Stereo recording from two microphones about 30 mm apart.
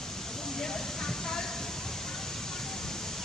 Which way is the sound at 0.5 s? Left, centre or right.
Centre.